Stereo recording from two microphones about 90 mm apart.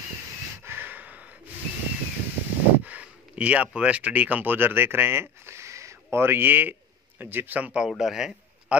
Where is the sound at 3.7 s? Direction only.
10° right (ahead or behind).